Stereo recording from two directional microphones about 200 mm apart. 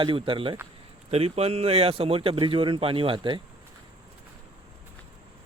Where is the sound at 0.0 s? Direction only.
25° right (ahead or behind).